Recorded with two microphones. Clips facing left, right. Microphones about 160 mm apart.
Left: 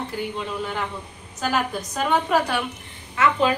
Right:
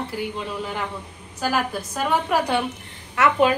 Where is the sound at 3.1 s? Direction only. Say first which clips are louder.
Right 2 dB; 75° right (ahead or behind).